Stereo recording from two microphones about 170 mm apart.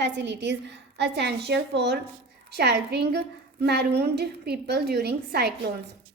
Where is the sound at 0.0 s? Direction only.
90° right; by 5.7 s 75° right (ahead or behind).